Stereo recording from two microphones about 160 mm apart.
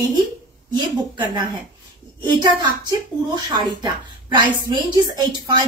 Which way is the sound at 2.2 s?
30° right (ahead or behind).